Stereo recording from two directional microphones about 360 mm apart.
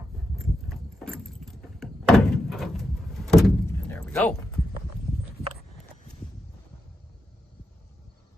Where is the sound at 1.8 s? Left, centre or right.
Centre.